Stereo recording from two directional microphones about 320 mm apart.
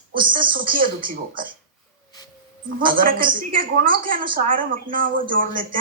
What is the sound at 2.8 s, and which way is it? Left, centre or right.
A woman's voice, right.